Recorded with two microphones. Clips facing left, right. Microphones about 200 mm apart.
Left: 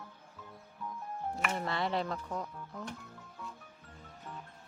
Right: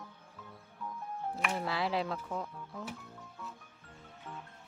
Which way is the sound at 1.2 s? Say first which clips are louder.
Even; centre (ahead or behind).